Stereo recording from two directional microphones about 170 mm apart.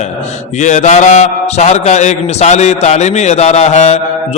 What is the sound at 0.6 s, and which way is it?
Mantra, 45° left (ahead or behind).